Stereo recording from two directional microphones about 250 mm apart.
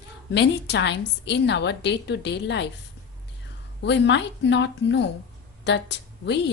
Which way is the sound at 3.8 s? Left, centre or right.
Left.